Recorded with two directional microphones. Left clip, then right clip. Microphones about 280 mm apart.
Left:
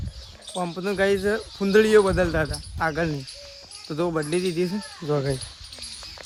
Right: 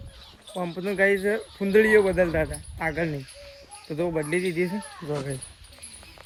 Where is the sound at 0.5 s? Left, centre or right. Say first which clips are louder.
Left 2 dB; centre.